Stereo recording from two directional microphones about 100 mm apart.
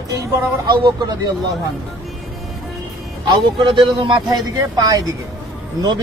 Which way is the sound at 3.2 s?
50° right (ahead or behind).